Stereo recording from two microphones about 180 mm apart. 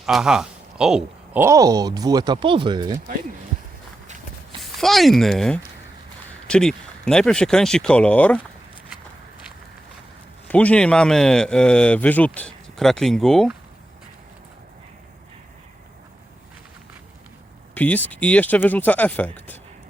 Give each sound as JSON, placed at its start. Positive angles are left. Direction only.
{"t": 0.0, "sound": "speech", "side_deg": -5}
{"t": 4.8, "sound": "speech", "side_deg": 0}
{"t": 10.5, "sound": "speech", "side_deg": 10}
{"t": 17.7, "sound": "speech", "side_deg": 10}